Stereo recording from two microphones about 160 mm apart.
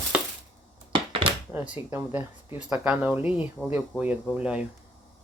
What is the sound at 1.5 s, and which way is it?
Speech, 10° right (ahead or behind).